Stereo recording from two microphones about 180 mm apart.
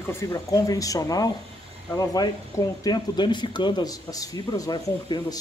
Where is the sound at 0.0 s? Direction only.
15° left (ahead or behind).